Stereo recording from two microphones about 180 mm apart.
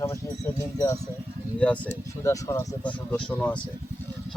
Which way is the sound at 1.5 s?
5° left (ahead or behind).